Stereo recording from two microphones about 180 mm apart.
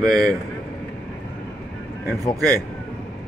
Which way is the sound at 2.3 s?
20° right (ahead or behind).